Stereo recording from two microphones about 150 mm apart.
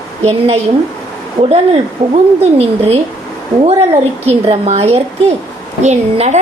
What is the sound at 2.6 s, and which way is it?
Speech, 40° right (ahead or behind).